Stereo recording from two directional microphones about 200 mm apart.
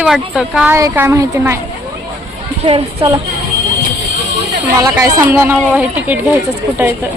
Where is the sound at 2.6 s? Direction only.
25° right (ahead or behind).